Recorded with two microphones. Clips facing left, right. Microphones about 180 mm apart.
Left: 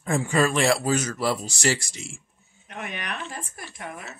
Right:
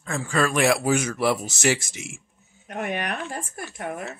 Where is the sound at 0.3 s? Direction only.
5° left (ahead or behind).